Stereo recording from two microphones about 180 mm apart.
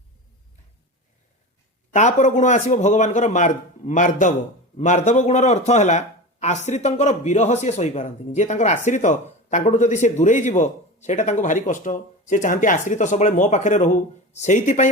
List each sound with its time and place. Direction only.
1.9 s speech: 40° left (ahead or behind)